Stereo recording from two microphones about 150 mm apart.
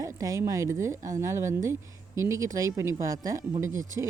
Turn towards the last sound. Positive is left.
turn(degrees=-20)  # may be behind; listen again after turning